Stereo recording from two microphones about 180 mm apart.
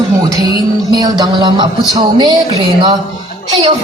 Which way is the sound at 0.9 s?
20° right (ahead or behind).